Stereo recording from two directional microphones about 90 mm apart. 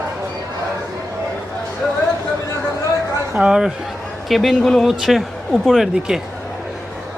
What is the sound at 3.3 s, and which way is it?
Speech, 10° right (ahead or behind).